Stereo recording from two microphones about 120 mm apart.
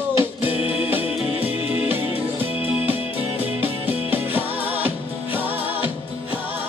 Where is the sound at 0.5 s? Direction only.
50° left (ahead or behind).